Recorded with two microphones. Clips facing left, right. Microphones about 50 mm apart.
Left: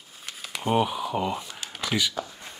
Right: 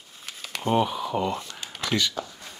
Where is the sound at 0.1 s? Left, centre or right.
Centre.